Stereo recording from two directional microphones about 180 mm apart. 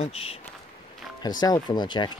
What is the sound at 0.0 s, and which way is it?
Speech, 35° left (ahead or behind).